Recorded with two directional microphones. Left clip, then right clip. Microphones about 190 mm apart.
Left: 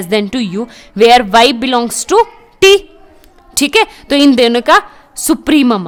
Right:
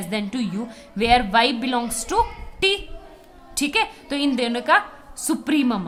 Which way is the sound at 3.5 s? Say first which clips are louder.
Left 11 dB; 50° left (ahead or behind).